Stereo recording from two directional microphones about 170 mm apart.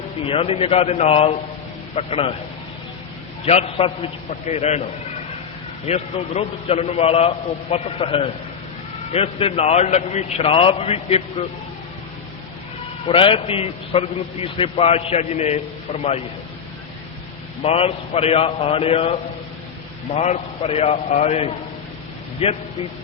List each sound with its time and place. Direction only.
0.3 s a man's voice: 35° left (ahead or behind)
3.4 s a man's voice: 35° left (ahead or behind)
5.8 s a man's voice: 40° left (ahead or behind)
13.1 s a man's voice: 30° left (ahead or behind)
17.6 s a man's voice: 35° left (ahead or behind)